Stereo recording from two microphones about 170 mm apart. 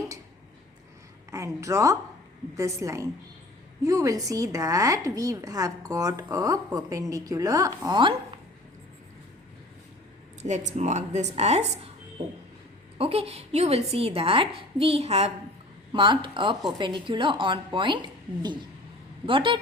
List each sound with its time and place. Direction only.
1.3 s a woman's voice: 20° right (ahead or behind)
10.4 s a woman's voice: 45° right (ahead or behind)
13.0 s a woman's voice: 35° right (ahead or behind)